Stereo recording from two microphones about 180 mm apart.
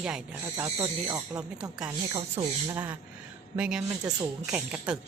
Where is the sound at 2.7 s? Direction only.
10° right (ahead or behind).